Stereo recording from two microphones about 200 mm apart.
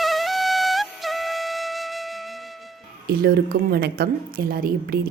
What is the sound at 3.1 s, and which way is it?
Speech, 50° right (ahead or behind).